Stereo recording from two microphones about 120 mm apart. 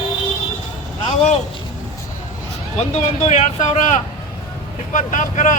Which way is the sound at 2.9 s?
65° left (ahead or behind).